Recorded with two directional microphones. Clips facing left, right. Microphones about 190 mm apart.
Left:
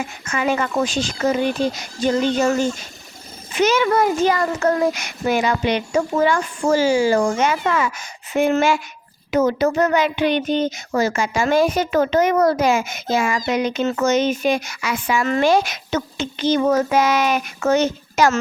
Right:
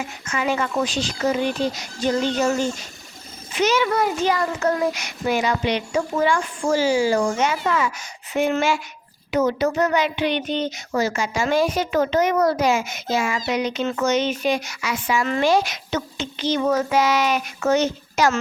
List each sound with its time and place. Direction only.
0.3 s speech: 55° left (ahead or behind)
3.5 s speech: 50° left (ahead or behind)